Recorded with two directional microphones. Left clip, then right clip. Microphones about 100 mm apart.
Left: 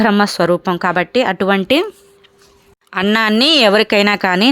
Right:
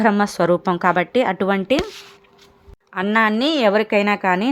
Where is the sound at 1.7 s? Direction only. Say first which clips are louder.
Left 5 dB; 35° left (ahead or behind).